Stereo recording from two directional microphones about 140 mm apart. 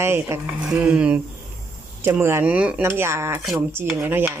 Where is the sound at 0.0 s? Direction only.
20° right (ahead or behind).